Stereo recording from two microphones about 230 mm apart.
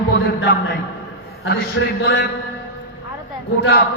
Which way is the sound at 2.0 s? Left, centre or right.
Left.